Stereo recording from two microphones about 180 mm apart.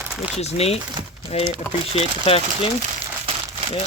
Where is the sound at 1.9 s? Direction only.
30° left (ahead or behind).